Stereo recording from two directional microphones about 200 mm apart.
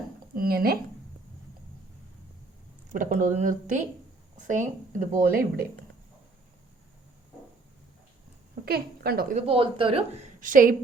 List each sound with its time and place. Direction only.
0.3 s speech: 50° right (ahead or behind)
2.9 s speech: 40° right (ahead or behind)
8.6 s a woman's voice: 50° right (ahead or behind)
9.5 s speech: 25° right (ahead or behind)
10.4 s speech: 40° right (ahead or behind)